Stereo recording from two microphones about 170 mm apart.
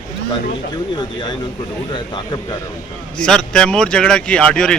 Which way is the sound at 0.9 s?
25° left (ahead or behind).